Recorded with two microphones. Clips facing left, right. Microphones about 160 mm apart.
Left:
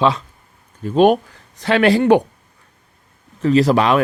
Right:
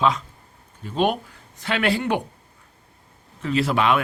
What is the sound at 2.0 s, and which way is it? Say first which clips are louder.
Speech: left 11 dB; 35° left (ahead or behind).